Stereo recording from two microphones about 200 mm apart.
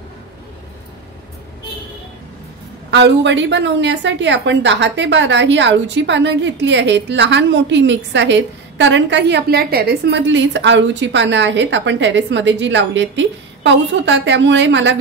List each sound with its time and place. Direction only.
2.9 s a woman's voice: 60° right (ahead or behind)